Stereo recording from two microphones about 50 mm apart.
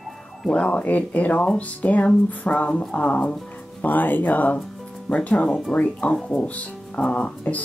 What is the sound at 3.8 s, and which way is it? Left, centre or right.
Speech, left.